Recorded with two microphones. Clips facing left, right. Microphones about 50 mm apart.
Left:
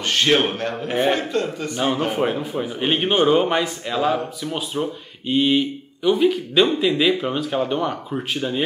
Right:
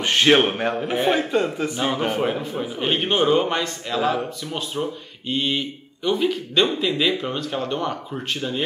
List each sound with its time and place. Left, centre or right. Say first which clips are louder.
0.0 s speech: right 2 dB; centre
1.8 s a man's voice: left 3 dB; centre